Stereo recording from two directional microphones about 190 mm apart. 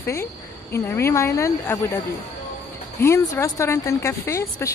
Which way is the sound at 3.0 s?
15° left (ahead or behind).